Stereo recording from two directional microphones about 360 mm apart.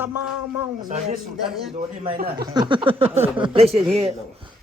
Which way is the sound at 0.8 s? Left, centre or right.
Right.